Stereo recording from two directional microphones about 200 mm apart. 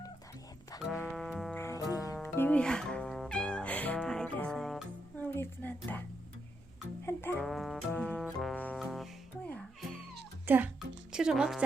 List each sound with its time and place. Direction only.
1.0 s music: centre (ahead or behind)
1.5 s music: 15° left (ahead or behind)
2.2 s cat: 10° left (ahead or behind)
5.3 s a sound: 10° left (ahead or behind)
7.0 s music: 10° left (ahead or behind)
7.4 s brass instrument: centre (ahead or behind)
8.8 s music: centre (ahead or behind)
10.4 s music: 10° right (ahead or behind)